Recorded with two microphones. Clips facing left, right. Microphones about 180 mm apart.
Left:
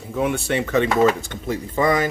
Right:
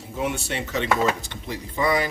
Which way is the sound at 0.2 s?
55° left (ahead or behind).